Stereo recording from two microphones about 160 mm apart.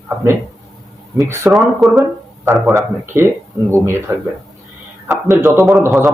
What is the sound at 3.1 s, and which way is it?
Speech, 15° right (ahead or behind).